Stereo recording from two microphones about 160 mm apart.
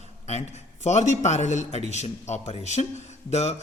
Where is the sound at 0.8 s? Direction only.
45° left (ahead or behind).